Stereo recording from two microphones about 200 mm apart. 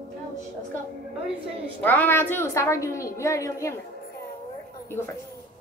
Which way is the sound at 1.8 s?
10° left (ahead or behind).